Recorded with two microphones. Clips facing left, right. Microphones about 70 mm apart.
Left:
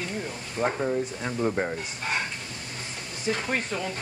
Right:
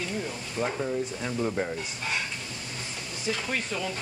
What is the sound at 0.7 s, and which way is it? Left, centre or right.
Speech, left.